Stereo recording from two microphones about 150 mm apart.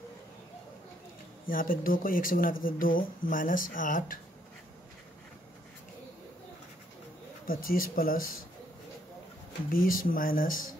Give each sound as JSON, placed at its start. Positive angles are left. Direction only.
{"t": 1.5, "sound": "speech", "side_deg": 70}
{"t": 7.4, "sound": "speech", "side_deg": 70}
{"t": 9.7, "sound": "speech", "side_deg": 70}